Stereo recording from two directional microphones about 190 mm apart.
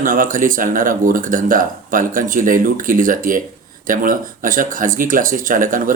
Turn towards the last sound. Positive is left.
turn(degrees=-45)  # may be behind; listen again after turning